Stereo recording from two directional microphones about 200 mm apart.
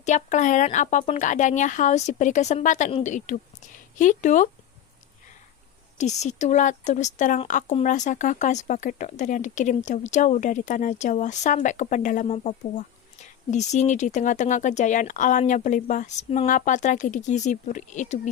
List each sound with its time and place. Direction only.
0.0 s speech: 35° left (ahead or behind)
6.0 s speech: 35° left (ahead or behind)